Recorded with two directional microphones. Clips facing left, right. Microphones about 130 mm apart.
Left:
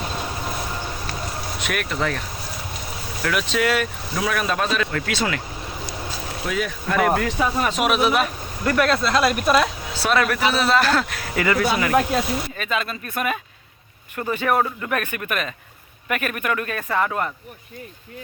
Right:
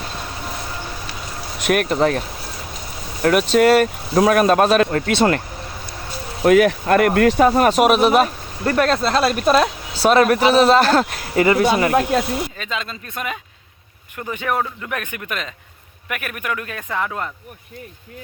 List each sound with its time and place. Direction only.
1.6 s a man's voice: 45° right (ahead or behind)
3.2 s speech: 45° right (ahead or behind)
4.9 s a man's voice: 35° right (ahead or behind)
5.1 s speech: 50° right (ahead or behind)
6.4 s speech: 65° right (ahead or behind)
7.3 s a man's voice: 50° right (ahead or behind); by 12.2 s 35° right (ahead or behind)
12.5 s speech: 20° right (ahead or behind)
14.5 s speech: 5° left (ahead or behind)
14.9 s speech: 15° right (ahead or behind)
17.1 s speech: 10° left (ahead or behind)